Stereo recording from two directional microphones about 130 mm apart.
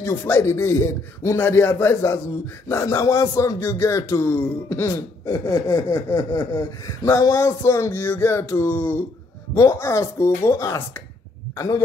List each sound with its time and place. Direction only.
0.0 s a man's voice: 20° left (ahead or behind)